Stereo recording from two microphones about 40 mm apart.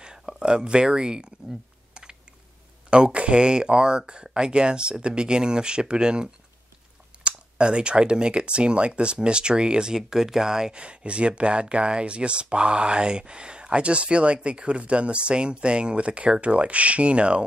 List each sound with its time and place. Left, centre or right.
0.0 s speech: centre
2.9 s speech: right
10.8 s speech: right